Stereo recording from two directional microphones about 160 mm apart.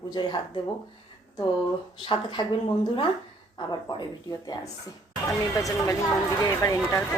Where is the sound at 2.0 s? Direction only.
30° left (ahead or behind).